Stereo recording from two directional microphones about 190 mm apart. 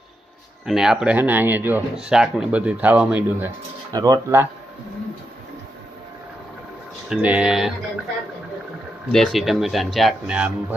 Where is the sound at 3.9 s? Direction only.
20° right (ahead or behind).